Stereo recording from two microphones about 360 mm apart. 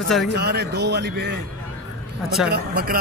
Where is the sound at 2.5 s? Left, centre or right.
Right.